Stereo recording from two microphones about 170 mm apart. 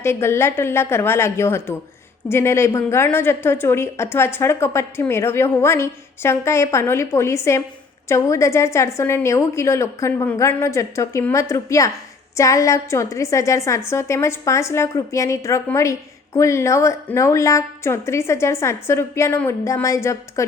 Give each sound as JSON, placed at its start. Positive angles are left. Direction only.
{"t": 0.0, "sound": "a woman's voice", "side_deg": 15}